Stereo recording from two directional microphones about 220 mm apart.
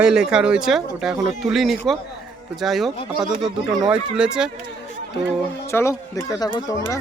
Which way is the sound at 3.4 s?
15° right (ahead or behind).